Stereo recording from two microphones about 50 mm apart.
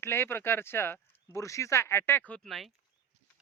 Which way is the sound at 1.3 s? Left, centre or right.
Left.